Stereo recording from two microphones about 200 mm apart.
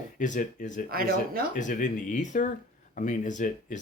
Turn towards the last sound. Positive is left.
turn(degrees=40)  # may be behind; listen again after turning